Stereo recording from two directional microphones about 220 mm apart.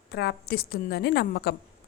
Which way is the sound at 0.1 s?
50° left (ahead or behind).